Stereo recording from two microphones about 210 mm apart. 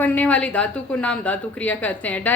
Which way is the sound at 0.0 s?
5° left (ahead or behind).